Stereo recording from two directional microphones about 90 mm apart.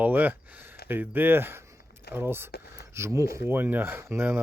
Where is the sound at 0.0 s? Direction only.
20° right (ahead or behind).